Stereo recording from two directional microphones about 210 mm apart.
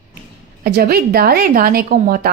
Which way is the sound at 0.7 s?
45° right (ahead or behind).